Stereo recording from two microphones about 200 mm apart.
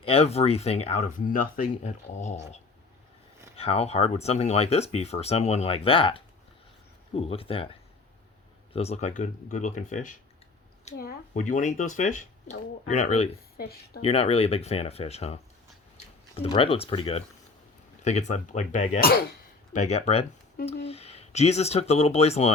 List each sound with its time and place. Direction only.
0.0 s speech: 30° left (ahead or behind)
3.6 s speech: 30° left (ahead or behind)
10.9 s speech: 50° left (ahead or behind)
13.6 s speech: 50° left (ahead or behind)
14.0 s speech: 30° left (ahead or behind); by 19.2 s 50° left (ahead or behind)
19.7 s speech: 35° left (ahead or behind)